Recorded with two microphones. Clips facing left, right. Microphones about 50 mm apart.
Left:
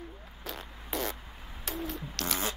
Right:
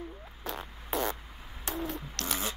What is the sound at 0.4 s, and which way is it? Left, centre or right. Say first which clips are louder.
Music: right 3 dB; centre.